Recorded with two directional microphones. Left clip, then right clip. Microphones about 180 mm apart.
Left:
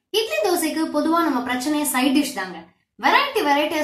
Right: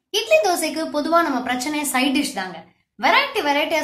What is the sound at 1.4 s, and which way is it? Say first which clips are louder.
Speech: even; 35° right (ahead or behind).